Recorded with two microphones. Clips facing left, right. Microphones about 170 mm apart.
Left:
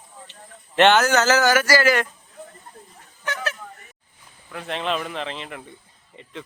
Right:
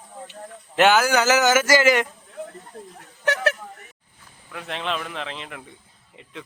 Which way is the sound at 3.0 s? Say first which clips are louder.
Right 6 dB; 70° right (ahead or behind).